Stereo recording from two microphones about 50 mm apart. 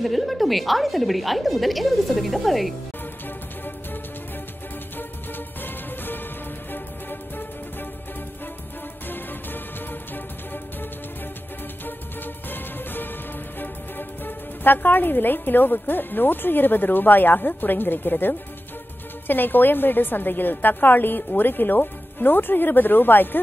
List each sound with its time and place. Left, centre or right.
0.0 s a woman's voice: centre
5.6 s music: left
10.1 s music: left
12.4 s music: left
13.6 s a woman's voice: left